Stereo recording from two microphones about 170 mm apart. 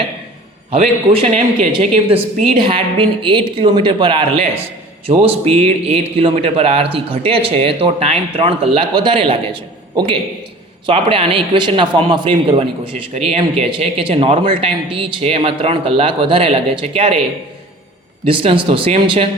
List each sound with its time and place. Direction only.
1.2 s a man's voice: 35° right (ahead or behind)
10.8 s a man's voice: 35° right (ahead or behind)
18.3 s a man's voice: 30° right (ahead or behind)